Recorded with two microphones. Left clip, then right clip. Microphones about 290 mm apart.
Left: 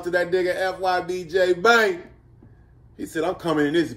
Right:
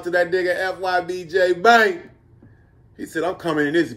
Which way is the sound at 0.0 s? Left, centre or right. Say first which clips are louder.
Right 2 dB; centre.